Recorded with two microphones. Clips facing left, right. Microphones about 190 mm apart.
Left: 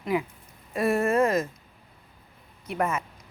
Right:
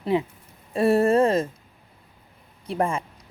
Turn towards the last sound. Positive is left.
turn(degrees=-30)  # may be behind; listen again after turning